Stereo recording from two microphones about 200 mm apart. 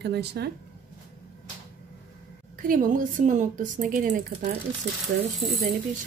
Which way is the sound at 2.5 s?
45° right (ahead or behind).